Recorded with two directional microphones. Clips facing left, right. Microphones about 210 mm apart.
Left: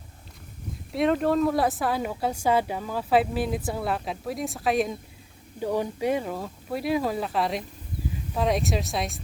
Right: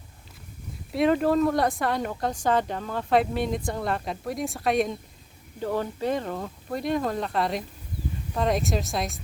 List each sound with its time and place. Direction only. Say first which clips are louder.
0.9 s speech: right 1 dB; centre (ahead or behind)
5.5 s speech: left 1 dB; 15° left (ahead or behind)